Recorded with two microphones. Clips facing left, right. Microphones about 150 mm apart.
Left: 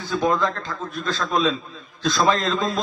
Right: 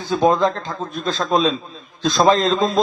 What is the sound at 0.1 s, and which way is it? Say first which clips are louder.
A man's voice: right 5 dB; 25° right (ahead or behind).